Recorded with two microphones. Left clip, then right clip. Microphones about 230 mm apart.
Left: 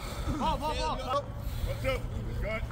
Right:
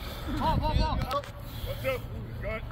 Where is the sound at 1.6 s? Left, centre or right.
Right.